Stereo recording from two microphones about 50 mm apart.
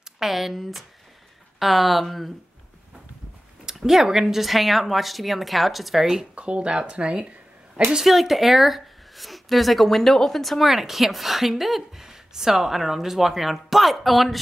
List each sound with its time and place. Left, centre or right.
0.2 s speech: centre
3.6 s speech: centre
6.3 s speech: right
7.9 s speech: centre